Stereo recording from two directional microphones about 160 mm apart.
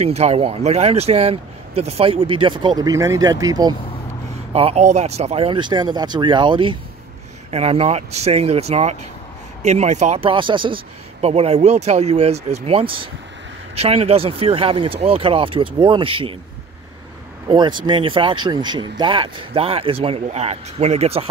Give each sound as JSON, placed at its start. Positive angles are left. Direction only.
{"t": 0.0, "sound": "speech", "side_deg": -40}
{"t": 4.6, "sound": "speech", "side_deg": -40}
{"t": 17.5, "sound": "speech", "side_deg": -30}